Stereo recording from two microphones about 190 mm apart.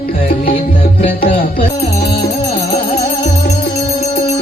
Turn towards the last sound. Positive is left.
turn(degrees=55)  # may be behind; listen again after turning